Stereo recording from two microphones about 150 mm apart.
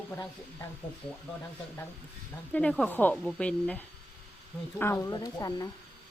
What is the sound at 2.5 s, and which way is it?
A woman's voice, 10° left (ahead or behind).